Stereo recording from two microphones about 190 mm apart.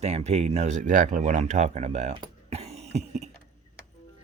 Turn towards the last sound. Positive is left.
turn(degrees=-35)  # may be behind; listen again after turning